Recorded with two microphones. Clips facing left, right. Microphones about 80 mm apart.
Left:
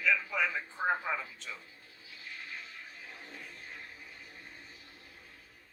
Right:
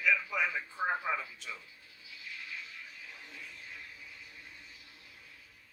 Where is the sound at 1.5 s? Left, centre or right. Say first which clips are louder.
Left 1 dB; left.